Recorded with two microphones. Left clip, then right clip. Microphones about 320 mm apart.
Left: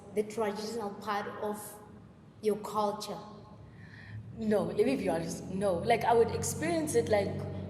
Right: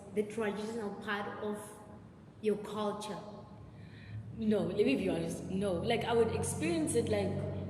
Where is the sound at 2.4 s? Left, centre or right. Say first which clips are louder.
Left 4 dB; centre.